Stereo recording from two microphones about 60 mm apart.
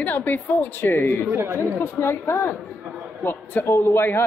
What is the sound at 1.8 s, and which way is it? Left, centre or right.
Speech, left.